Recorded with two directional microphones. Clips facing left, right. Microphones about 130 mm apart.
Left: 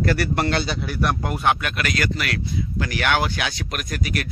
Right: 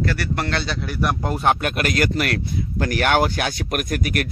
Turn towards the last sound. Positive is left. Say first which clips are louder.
# right 4 dB
turn(degrees=-50)  # may be behind; listen again after turning